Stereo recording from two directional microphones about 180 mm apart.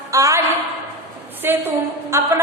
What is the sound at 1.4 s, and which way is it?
Speech, 10° right (ahead or behind).